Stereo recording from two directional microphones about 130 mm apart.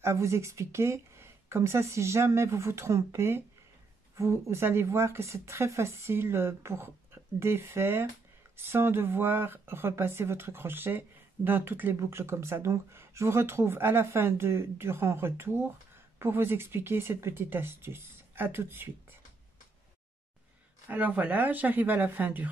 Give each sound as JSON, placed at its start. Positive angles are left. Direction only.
{"t": 0.0, "sound": "speech", "side_deg": -20}
{"t": 20.9, "sound": "speech", "side_deg": -10}